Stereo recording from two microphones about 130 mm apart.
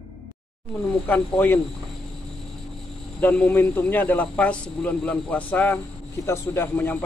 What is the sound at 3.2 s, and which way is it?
Speech, 10° left (ahead or behind).